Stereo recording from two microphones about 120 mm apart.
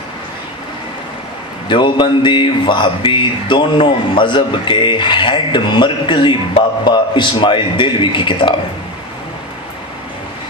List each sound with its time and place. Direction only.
1.7 s speech: 40° left (ahead or behind)